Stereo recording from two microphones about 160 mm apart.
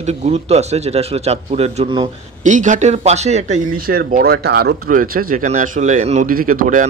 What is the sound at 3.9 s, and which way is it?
Speech, 70° right (ahead or behind).